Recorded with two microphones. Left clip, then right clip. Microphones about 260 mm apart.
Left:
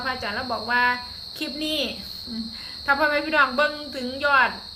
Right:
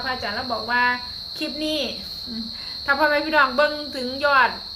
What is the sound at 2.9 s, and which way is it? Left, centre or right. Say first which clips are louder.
A woman's voice: right 2 dB; centre.